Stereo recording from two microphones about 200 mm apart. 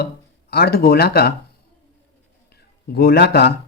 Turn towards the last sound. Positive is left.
turn(degrees=55)  # may be behind; listen again after turning